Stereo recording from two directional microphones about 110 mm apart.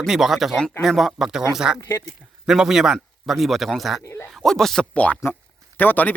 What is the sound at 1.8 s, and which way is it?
Speech, 25° left (ahead or behind).